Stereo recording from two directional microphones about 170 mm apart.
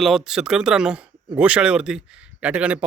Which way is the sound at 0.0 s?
Centre (ahead or behind).